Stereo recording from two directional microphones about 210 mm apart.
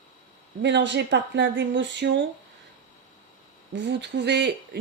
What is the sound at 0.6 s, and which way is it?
Speech, 55° right (ahead or behind).